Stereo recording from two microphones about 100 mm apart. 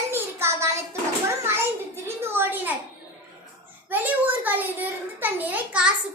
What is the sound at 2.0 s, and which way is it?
Speech, 20° right (ahead or behind).